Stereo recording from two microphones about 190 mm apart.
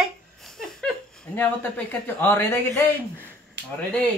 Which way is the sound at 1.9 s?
10° left (ahead or behind).